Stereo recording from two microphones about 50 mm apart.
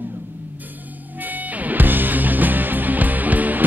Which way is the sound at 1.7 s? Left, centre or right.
Right.